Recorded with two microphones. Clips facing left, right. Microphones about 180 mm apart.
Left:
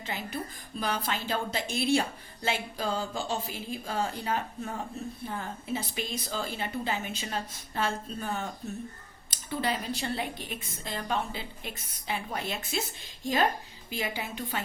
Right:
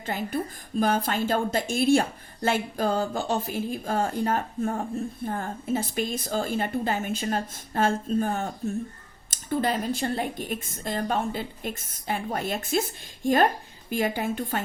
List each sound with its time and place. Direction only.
0.0 s a woman's voice: 50° right (ahead or behind)